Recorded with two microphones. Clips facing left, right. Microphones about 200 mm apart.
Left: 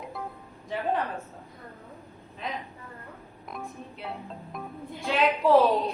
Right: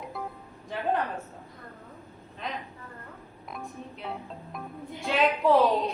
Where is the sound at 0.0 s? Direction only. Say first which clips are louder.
Even; centre (ahead or behind).